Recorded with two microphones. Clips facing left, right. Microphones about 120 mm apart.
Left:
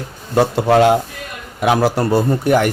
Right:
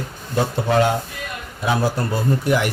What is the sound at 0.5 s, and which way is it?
A man's voice, 90° left.